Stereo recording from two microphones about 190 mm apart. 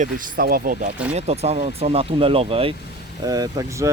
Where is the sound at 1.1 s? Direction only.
35° right (ahead or behind).